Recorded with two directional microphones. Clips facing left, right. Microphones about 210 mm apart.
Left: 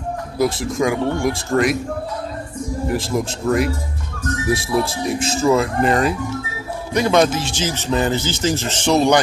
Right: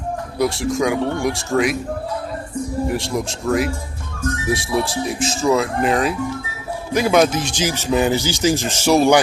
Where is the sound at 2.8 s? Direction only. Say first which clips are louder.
Left 3 dB; centre (ahead or behind).